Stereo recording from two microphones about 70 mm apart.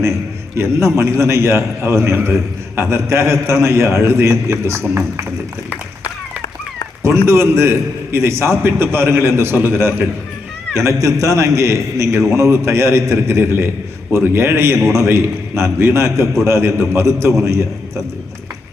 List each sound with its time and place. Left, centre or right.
0.5 s a man's voice: right
7.0 s a man's voice: right
10.8 s a man's voice: right